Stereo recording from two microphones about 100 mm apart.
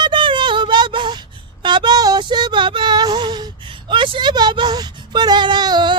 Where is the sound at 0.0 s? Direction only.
55° right (ahead or behind).